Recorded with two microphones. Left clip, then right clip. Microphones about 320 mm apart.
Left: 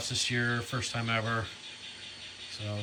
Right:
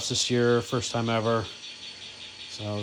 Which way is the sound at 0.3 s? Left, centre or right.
Right.